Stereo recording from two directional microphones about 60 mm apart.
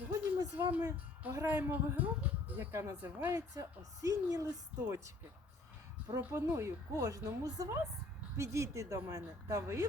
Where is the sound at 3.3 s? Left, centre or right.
Right.